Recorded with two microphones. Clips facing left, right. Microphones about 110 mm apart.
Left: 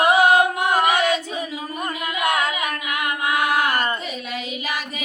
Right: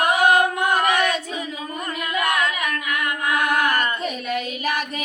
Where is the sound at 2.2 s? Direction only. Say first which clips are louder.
Left 1 dB; 30° left (ahead or behind).